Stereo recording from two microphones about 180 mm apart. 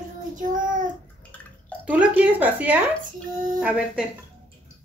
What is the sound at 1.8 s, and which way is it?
Speech, 10° right (ahead or behind).